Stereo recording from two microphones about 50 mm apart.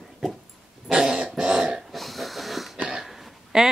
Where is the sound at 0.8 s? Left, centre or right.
Centre.